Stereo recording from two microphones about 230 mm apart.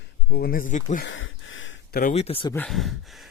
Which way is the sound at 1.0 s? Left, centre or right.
Left.